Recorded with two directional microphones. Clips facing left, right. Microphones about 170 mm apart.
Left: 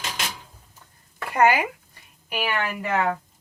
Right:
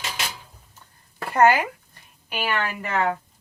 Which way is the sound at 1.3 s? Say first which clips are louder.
Right 2 dB; 10° left (ahead or behind).